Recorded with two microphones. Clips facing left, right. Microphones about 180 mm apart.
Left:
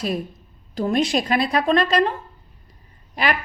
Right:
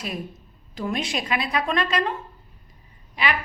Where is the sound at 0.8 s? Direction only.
35° left (ahead or behind).